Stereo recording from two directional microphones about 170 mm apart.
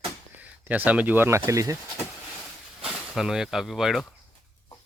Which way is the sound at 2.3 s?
Centre (ahead or behind).